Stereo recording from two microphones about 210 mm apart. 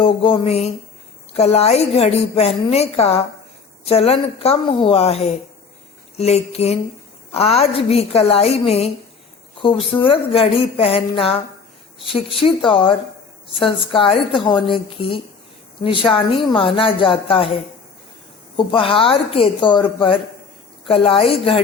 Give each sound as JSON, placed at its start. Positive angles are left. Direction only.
{"t": 0.0, "sound": "a woman's voice", "side_deg": 25}